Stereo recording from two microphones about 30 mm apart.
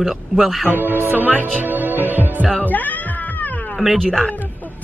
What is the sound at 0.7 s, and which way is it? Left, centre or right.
Speech, right.